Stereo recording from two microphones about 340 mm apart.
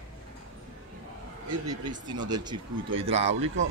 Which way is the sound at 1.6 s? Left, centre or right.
Centre.